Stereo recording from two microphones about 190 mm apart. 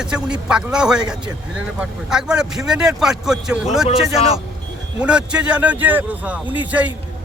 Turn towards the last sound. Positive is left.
turn(degrees=-10)  # may be behind; listen again after turning